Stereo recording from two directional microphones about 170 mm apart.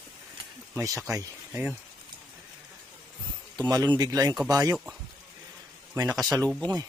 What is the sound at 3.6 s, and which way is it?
A man's voice, 20° right (ahead or behind).